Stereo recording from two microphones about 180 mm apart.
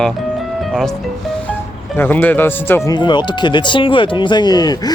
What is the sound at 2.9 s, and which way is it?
Speech, 25° left (ahead or behind).